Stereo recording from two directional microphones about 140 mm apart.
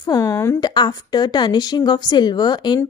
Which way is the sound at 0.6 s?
30° left (ahead or behind).